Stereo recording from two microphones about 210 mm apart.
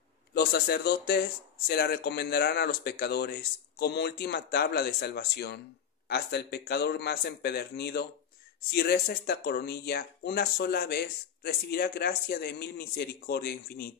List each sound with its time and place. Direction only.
0.3 s speech: 50° left (ahead or behind)